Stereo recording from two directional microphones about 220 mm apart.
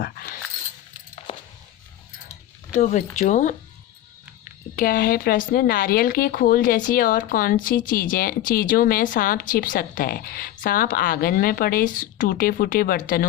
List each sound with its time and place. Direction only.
2.7 s a woman's voice: 35° left (ahead or behind)
4.8 s a woman's voice: 40° left (ahead or behind)